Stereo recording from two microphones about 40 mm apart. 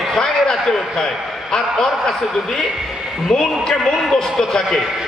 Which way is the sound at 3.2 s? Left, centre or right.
Centre.